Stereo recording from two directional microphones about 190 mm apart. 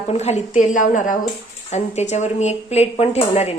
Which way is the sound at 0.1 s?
35° left (ahead or behind).